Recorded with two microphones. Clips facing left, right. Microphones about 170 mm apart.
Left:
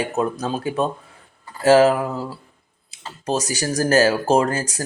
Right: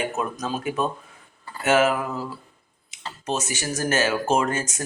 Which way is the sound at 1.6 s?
30° left (ahead or behind).